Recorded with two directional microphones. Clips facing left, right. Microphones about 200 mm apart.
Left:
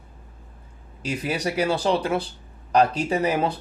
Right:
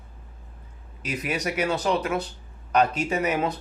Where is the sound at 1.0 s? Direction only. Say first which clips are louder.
Left 2 dB; 30° left (ahead or behind).